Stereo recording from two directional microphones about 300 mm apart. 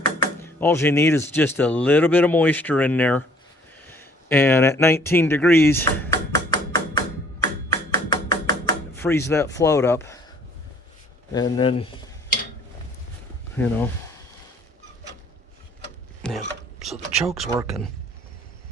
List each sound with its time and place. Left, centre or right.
0.2 s speech: centre
3.8 s a sound: centre
9.0 s speech: centre
13.6 s speech: centre
16.2 s filing: centre
16.9 s speech: centre